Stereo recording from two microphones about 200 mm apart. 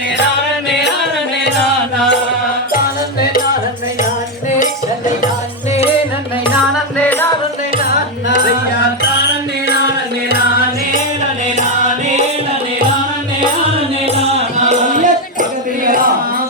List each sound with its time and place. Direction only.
7.0 s music: 10° left (ahead or behind)
14.7 s music: 40° right (ahead or behind)